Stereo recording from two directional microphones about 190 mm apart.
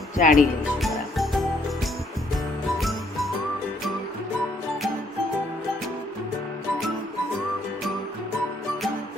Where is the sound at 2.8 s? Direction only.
Centre (ahead or behind).